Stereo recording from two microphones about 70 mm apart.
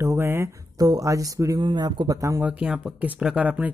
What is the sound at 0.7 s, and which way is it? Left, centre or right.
Speech, right.